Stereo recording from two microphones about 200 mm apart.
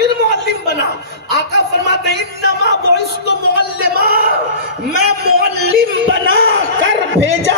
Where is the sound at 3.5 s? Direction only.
50° right (ahead or behind).